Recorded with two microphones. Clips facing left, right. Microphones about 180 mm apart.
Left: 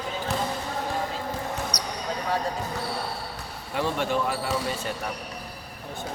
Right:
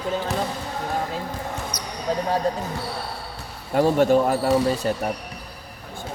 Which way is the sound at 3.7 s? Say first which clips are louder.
Right 9 dB; 45° right (ahead or behind).